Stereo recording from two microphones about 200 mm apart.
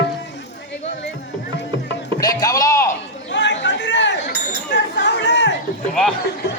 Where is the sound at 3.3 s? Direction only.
60° left (ahead or behind).